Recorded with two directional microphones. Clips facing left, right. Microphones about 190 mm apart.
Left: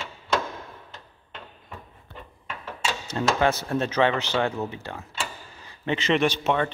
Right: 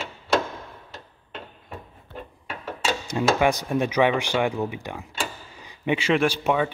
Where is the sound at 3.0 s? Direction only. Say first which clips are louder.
Right 2 dB; 15° right (ahead or behind).